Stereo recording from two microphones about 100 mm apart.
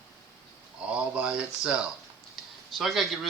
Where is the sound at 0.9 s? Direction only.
10° right (ahead or behind).